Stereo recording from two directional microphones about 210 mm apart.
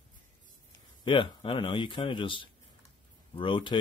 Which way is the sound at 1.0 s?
25° left (ahead or behind).